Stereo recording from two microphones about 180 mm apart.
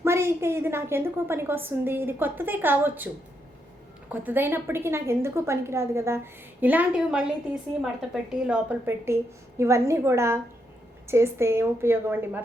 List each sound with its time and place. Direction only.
0.0 s a woman's voice: 15° right (ahead or behind)
4.1 s a woman's voice: 10° right (ahead or behind)